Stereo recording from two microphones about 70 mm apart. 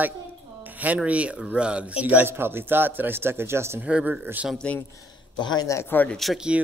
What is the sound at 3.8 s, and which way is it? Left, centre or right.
Speech, centre.